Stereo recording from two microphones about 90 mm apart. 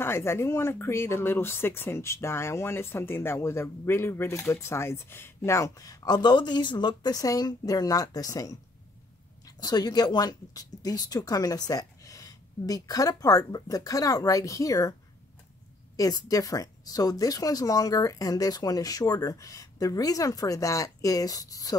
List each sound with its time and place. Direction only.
0.0 s speech: 30° left (ahead or behind); by 8.5 s 45° left (ahead or behind)
9.6 s speech: 50° left (ahead or behind)
16.0 s speech: 40° left (ahead or behind)